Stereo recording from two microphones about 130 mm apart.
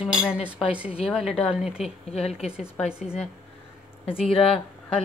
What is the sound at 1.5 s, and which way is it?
Speech, 5° right (ahead or behind).